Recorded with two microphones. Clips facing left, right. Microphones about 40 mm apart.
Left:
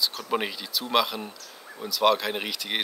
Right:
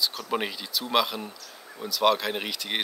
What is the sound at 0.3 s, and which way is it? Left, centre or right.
Speech, centre.